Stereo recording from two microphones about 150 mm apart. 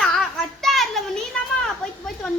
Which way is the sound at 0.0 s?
Centre (ahead or behind).